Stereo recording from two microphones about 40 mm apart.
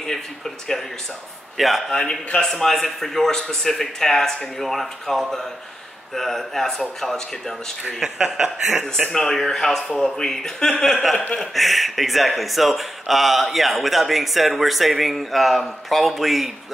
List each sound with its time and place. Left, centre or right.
1.6 s speech: centre
1.9 s speech: centre
2.5 s speech: centre
8.0 s speech: centre
9.1 s speech: centre
11.5 s speech: centre